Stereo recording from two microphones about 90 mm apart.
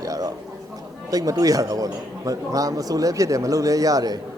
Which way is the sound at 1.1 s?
40° right (ahead or behind).